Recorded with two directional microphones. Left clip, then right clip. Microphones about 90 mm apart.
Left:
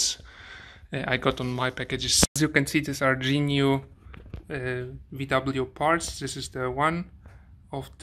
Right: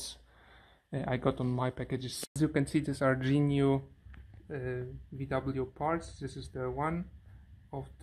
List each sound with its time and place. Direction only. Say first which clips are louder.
0.0 s a sound: left 17 dB; 5° right (ahead or behind)
2.3 s speech: left 7 dB; 10° right (ahead or behind)
2.8 s speech: left 6 dB; 30° right (ahead or behind)
3.4 s speech: left 5 dB; 10° right (ahead or behind)